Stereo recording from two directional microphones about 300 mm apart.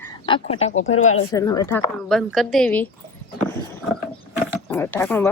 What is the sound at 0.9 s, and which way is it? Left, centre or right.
Speech, left.